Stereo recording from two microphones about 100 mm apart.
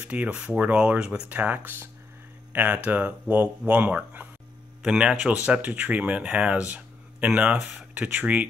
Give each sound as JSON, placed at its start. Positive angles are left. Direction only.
{"t": 0.0, "sound": "speech", "side_deg": -15}